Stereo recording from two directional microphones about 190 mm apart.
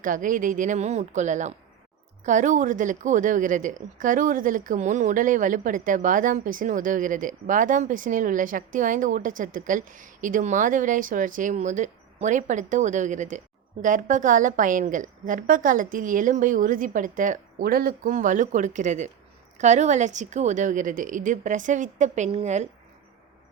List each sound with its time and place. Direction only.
0.0 s a woman's voice: 45° right (ahead or behind)